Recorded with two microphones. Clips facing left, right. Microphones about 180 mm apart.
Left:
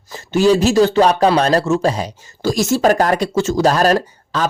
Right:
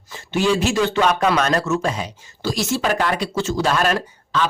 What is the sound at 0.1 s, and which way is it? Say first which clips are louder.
Speech: left 6 dB; 40° left (ahead or behind).